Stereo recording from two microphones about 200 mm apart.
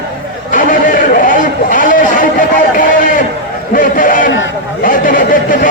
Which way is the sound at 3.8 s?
40° left (ahead or behind).